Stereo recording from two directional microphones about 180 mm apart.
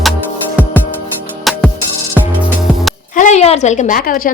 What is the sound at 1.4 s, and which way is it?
Music, centre (ahead or behind).